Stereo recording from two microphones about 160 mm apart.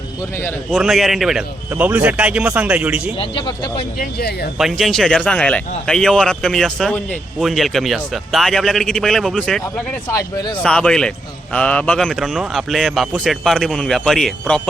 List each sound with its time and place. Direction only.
0.2 s a man's voice: 15° left (ahead or behind)
0.7 s speech: centre (ahead or behind)
3.2 s speech: 30° left (ahead or behind)
3.9 s speech: 65° left (ahead or behind)
4.5 s speech: centre (ahead or behind)
10.1 s speech: 20° left (ahead or behind)
10.6 s speech: 5° left (ahead or behind)